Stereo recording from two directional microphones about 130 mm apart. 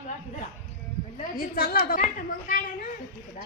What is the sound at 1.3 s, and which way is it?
A woman's voice, 90° left.